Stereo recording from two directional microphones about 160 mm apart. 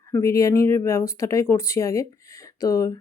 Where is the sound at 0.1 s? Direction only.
20° left (ahead or behind).